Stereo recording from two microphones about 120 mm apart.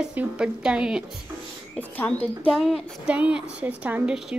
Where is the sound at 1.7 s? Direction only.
15° left (ahead or behind).